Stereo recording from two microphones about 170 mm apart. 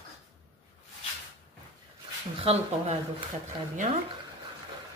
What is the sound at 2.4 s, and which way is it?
Speech, 40° right (ahead or behind).